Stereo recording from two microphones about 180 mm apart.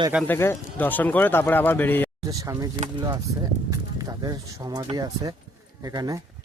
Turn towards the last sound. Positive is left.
turn(degrees=-20)  # may be behind; listen again after turning